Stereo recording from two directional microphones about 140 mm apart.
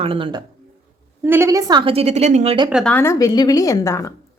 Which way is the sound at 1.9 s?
50° right (ahead or behind).